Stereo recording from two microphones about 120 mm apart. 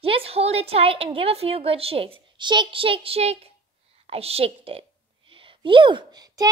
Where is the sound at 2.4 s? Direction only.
40° right (ahead or behind).